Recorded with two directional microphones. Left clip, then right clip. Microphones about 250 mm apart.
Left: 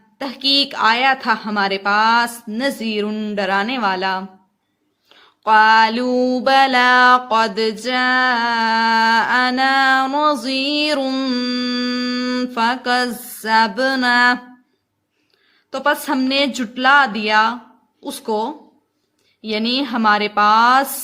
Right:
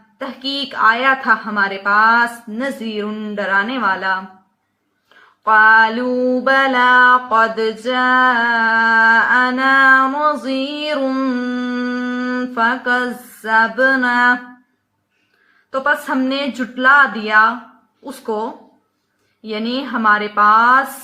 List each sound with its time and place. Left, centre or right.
0.2 s mantra: left
5.4 s mantra: left
15.7 s mantra: left